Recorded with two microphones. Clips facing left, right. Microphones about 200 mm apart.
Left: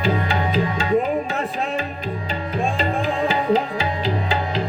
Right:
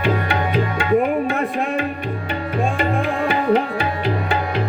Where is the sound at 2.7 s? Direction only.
60° right (ahead or behind).